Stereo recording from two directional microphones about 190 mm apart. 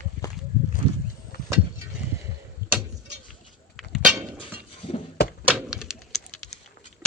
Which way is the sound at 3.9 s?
5° right (ahead or behind).